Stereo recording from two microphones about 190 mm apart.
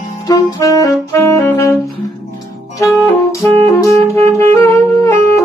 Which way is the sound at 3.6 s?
15° left (ahead or behind).